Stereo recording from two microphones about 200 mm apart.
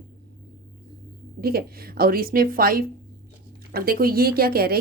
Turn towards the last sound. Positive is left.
turn(degrees=-50)  # may be behind; listen again after turning